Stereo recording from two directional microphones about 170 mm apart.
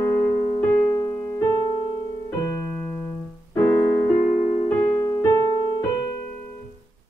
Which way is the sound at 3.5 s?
15° left (ahead or behind).